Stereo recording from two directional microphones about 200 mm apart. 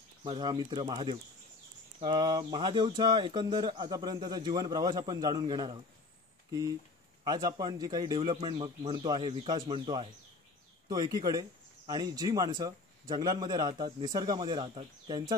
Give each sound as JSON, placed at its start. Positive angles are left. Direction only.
{"t": 0.2, "sound": "speech", "side_deg": -20}
{"t": 7.2, "sound": "speech", "side_deg": -20}